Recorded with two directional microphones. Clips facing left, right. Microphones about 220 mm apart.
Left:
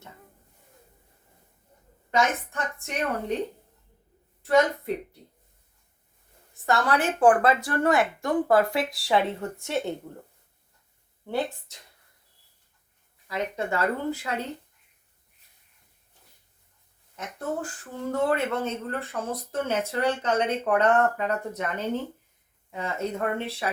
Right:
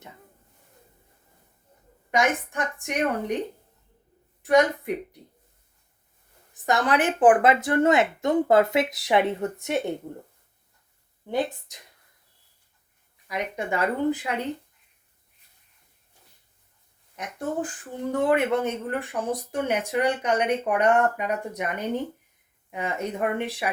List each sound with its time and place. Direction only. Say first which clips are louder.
2.0 s speech: right 1 dB; 15° right (ahead or behind)
4.4 s speech: right 2 dB; 15° right (ahead or behind)
6.5 s speech: right 1 dB; 20° right (ahead or behind)
11.7 s speech: right 2 dB; 15° right (ahead or behind)
13.2 s speech: even; 15° right (ahead or behind)
17.2 s speech: right 2 dB; 15° right (ahead or behind)